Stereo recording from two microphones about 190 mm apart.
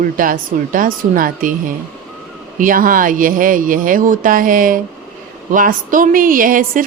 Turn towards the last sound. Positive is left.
turn(degrees=-45)  # may be behind; listen again after turning